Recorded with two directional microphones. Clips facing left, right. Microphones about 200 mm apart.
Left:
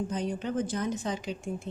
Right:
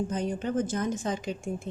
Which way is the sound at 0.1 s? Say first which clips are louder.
Right 2 dB; 50° right (ahead or behind).